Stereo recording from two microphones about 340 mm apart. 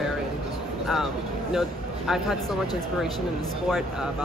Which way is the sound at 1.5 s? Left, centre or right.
Centre.